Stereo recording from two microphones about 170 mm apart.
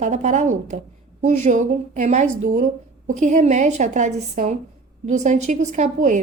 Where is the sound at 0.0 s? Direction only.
45° right (ahead or behind).